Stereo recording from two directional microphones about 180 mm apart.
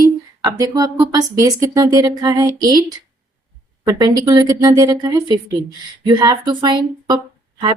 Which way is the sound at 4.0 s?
20° right (ahead or behind).